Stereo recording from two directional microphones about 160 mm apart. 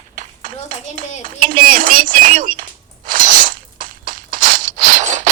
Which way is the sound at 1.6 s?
60° right (ahead or behind).